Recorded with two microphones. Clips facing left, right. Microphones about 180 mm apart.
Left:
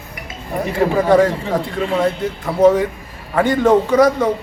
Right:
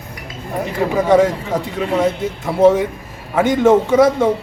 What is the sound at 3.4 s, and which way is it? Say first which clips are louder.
Speech: right 1 dB; 25° right (ahead or behind).